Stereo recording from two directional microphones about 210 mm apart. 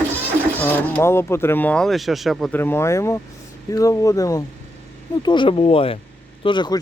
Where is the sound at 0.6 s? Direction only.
5° left (ahead or behind).